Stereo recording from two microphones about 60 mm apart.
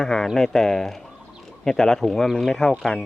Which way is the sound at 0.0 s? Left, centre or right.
Centre.